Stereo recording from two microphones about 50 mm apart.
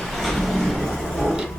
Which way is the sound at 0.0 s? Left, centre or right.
Centre.